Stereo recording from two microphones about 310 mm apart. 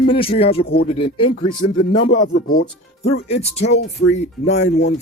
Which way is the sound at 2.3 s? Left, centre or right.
Left.